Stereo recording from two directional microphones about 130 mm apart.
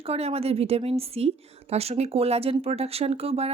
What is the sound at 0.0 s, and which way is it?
Speech, 50° right (ahead or behind).